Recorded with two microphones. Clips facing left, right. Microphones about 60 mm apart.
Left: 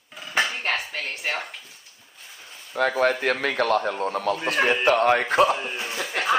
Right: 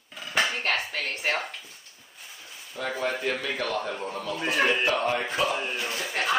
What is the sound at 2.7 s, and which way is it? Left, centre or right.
A man's voice, left.